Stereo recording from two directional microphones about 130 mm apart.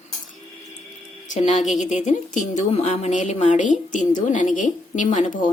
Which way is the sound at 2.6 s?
60° left (ahead or behind).